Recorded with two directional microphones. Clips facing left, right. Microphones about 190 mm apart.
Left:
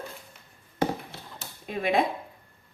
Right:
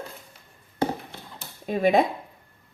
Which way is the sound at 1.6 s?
40° right (ahead or behind).